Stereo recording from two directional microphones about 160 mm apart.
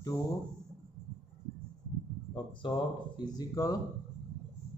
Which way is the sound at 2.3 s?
30° left (ahead or behind).